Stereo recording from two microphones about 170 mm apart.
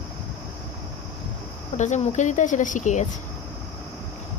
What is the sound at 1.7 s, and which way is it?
Speech, 45° left (ahead or behind).